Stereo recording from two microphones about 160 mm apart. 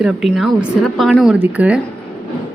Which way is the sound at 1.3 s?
10° right (ahead or behind).